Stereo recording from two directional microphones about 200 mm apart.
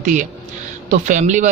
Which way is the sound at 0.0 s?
40° right (ahead or behind).